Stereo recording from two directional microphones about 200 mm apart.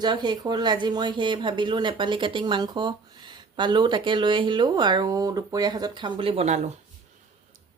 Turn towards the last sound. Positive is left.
turn(degrees=-35)  # may be behind; listen again after turning